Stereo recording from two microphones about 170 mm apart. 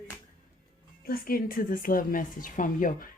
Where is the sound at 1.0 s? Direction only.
60° left (ahead or behind).